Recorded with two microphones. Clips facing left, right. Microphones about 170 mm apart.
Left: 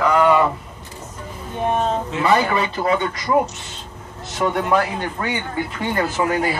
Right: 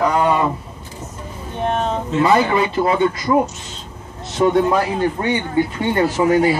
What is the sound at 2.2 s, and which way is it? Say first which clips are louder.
Speech: right 2 dB; 30° right (ahead or behind).